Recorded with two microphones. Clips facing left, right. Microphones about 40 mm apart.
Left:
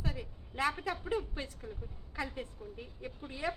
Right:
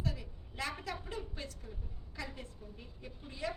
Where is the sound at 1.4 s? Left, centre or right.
Left.